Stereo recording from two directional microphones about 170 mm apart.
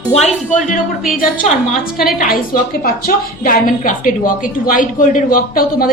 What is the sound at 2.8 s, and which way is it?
A woman's voice, 55° left (ahead or behind).